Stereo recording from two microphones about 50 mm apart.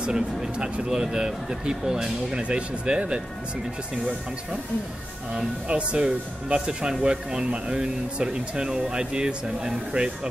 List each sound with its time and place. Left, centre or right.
0.0 s speech: centre
5.3 s speech: right